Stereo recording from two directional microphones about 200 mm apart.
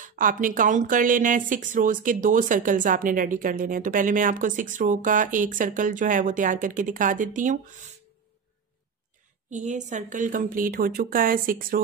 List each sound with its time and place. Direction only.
0.0 s speech: 40° right (ahead or behind)
9.5 s a woman's voice: 35° right (ahead or behind)